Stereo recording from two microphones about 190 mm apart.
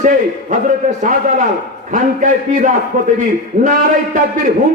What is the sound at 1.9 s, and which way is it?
A man's voice, 45° right (ahead or behind).